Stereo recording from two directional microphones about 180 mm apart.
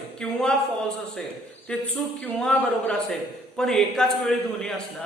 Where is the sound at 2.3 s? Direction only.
10° left (ahead or behind).